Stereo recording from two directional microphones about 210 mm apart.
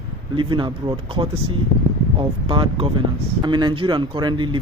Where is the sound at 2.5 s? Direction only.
25° right (ahead or behind).